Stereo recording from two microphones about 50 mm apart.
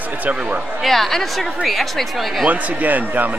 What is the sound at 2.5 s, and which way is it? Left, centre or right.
Speech, right.